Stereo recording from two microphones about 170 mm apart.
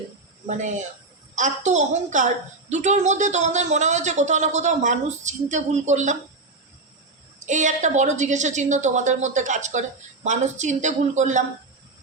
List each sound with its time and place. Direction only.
0.4 s a woman's voice: 45° right (ahead or behind)
7.4 s a woman's voice: 45° right (ahead or behind)